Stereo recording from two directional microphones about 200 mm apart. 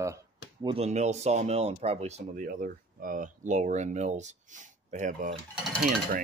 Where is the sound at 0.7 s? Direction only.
35° right (ahead or behind).